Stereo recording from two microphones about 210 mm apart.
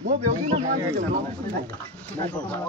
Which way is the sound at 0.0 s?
35° right (ahead or behind).